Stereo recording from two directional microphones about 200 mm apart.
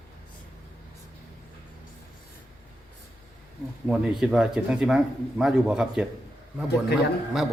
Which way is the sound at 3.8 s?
5° right (ahead or behind).